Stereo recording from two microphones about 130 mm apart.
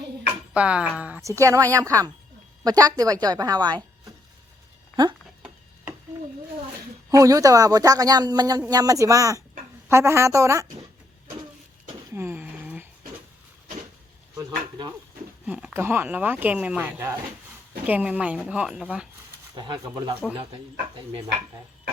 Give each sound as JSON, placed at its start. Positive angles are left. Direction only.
{"t": 0.5, "sound": "a woman's voice", "side_deg": -10}
{"t": 1.2, "sound": "a man's voice", "side_deg": -25}
{"t": 7.1, "sound": "a man's voice", "side_deg": -25}
{"t": 12.1, "sound": "a sound", "side_deg": -15}
{"t": 14.3, "sound": "speech", "side_deg": -30}
{"t": 15.4, "sound": "speech", "side_deg": -10}
{"t": 17.8, "sound": "speech", "side_deg": -10}
{"t": 19.5, "sound": "speech", "side_deg": -35}
{"t": 20.3, "sound": "speech", "side_deg": -45}